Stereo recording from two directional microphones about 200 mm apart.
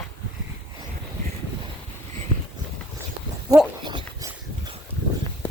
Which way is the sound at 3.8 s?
25° right (ahead or behind).